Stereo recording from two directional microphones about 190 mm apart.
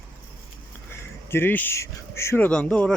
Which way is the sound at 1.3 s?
10° left (ahead or behind).